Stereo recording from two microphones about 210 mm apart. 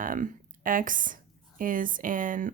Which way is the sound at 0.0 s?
40° right (ahead or behind).